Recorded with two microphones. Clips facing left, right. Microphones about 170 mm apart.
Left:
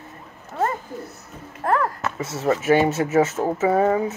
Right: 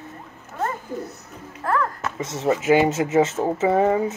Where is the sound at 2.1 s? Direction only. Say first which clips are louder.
Right 1 dB; 20° right (ahead or behind).